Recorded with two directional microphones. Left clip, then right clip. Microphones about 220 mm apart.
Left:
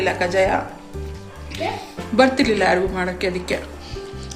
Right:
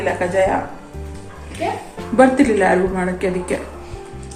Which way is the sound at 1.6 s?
25° left (ahead or behind).